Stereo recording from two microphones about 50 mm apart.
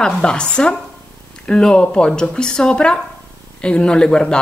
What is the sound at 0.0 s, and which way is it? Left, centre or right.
A woman's voice, centre.